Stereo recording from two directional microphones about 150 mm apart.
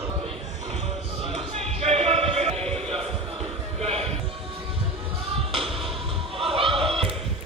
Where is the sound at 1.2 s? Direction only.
40° right (ahead or behind).